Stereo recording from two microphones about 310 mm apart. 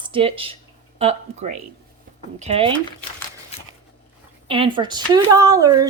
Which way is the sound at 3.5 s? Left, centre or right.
Centre.